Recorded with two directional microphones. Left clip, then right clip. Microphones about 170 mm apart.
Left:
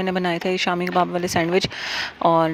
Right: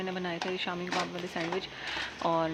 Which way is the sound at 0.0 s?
65° left (ahead or behind).